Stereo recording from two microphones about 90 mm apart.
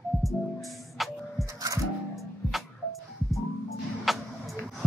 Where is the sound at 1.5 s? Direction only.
40° right (ahead or behind).